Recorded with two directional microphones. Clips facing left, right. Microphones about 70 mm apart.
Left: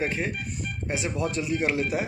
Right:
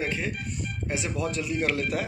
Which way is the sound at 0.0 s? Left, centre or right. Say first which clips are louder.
Left 2 dB; left.